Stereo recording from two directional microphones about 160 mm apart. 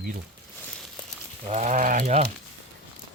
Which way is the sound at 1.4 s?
45° right (ahead or behind).